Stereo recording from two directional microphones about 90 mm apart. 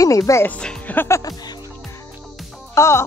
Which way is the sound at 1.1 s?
45° left (ahead or behind).